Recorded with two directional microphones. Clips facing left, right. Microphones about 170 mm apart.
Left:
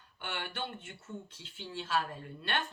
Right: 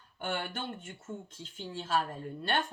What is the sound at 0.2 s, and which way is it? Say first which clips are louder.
Speech: right 4 dB; 45° right (ahead or behind).